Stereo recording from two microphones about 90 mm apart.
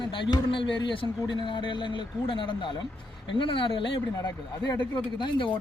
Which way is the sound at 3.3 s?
75° left (ahead or behind).